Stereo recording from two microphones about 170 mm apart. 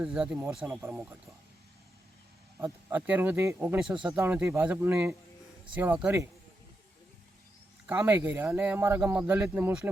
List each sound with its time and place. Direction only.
0.0 s a man's voice: 5° right (ahead or behind)
2.6 s a man's voice: 15° right (ahead or behind)
7.9 s a man's voice: 15° right (ahead or behind)